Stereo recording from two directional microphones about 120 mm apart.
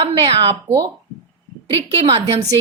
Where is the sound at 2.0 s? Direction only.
55° right (ahead or behind).